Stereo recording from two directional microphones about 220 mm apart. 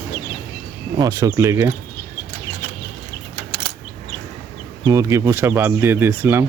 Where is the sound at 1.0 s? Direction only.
15° right (ahead or behind).